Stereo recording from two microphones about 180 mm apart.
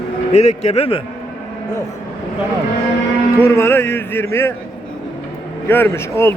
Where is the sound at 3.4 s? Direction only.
15° left (ahead or behind).